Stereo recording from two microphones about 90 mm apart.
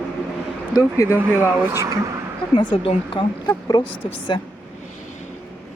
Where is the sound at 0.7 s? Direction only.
40° left (ahead or behind).